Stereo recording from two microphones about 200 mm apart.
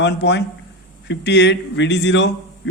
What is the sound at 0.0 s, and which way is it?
A man's voice, 60° left (ahead or behind).